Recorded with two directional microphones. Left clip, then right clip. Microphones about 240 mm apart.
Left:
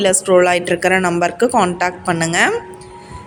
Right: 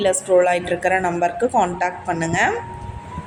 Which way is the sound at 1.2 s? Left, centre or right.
Left.